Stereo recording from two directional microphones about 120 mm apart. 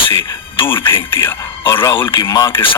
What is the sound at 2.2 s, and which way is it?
Speech, 30° left (ahead or behind).